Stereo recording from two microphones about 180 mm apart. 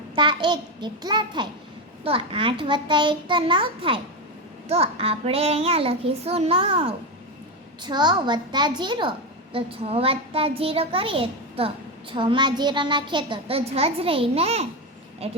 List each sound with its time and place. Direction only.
0.2 s a child's voice: 25° right (ahead or behind)